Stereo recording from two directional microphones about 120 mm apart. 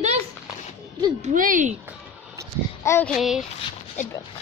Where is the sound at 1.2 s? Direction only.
90° right.